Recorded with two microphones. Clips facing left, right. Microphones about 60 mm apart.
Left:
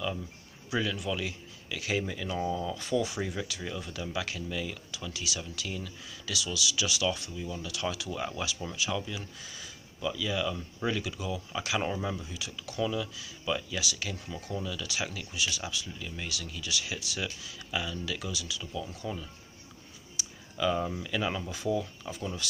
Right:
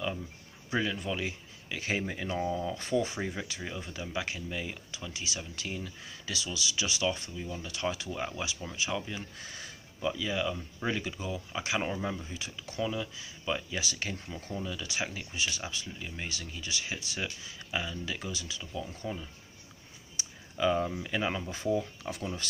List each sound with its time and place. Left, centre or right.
0.7 s speech: right
9.4 s speech: right
11.8 s speech: centre
12.2 s speech: right
20.2 s a sound: right
20.7 s speech: centre
21.0 s speech: right